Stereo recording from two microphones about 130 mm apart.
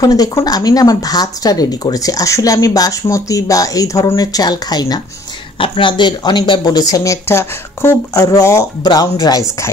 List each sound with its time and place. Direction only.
0.0 s speech: 25° left (ahead or behind)